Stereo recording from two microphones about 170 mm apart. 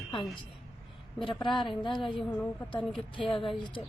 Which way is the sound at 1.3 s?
30° left (ahead or behind).